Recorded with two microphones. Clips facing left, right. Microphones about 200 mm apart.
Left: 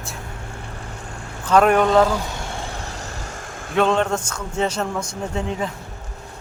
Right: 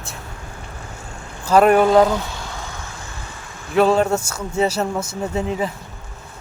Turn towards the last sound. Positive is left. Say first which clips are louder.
# right 3 dB
turn(degrees=-5)  # may be behind; listen again after turning